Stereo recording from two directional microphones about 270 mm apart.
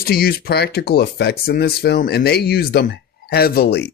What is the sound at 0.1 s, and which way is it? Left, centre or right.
Speech, left.